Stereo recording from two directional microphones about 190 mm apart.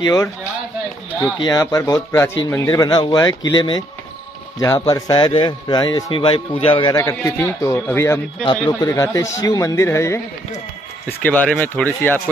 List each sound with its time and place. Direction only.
0.0 s a man's voice: 20° left (ahead or behind)
11.2 s a man's voice: 10° left (ahead or behind)